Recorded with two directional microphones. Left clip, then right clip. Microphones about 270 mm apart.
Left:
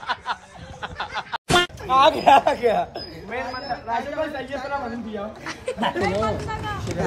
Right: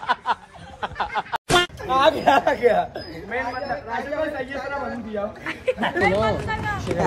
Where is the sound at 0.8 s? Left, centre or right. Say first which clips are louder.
Right 4 dB; centre.